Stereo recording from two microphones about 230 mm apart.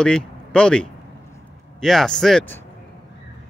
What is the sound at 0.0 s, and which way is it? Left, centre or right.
Speech, centre.